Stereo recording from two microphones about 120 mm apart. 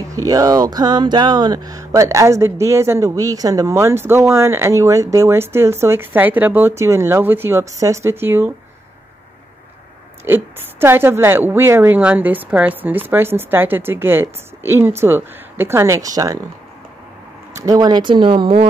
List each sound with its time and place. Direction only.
0.1 s speech: 25° right (ahead or behind)
10.2 s a woman's voice: 20° right (ahead or behind)
17.6 s speech: 30° right (ahead or behind); by 18.7 s 50° right (ahead or behind)